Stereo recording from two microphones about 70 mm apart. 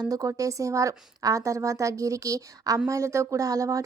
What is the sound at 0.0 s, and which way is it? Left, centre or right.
A woman's voice, right.